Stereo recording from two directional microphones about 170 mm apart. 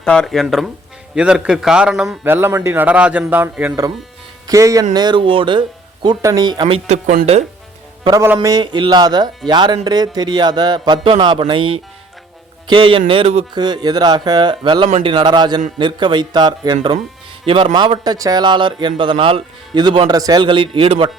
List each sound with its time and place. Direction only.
0.0 s a man's voice: 5° left (ahead or behind)
4.4 s speech: 20° right (ahead or behind); by 7.4 s 45° right (ahead or behind)
8.0 s a man's voice: 20° right (ahead or behind)
12.6 s a sound: 30° right (ahead or behind)
13.6 s a man's voice: 25° right (ahead or behind)